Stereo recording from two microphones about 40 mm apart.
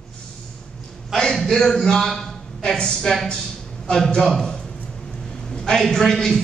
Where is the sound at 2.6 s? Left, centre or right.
Centre.